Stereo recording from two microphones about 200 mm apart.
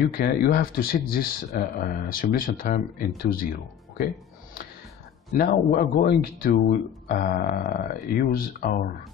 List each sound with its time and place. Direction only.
0.0 s speech: 50° left (ahead or behind)
5.3 s speech: 45° left (ahead or behind)